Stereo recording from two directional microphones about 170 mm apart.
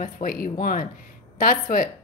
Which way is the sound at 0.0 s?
55° left (ahead or behind).